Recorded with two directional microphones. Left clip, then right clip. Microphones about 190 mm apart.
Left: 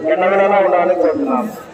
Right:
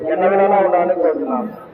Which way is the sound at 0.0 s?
35° right (ahead or behind).